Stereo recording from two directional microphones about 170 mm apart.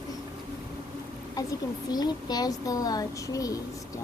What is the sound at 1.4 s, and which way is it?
A child's voice, 20° left (ahead or behind).